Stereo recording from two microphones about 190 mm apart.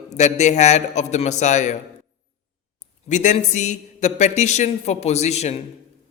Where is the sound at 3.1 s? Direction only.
40° left (ahead or behind).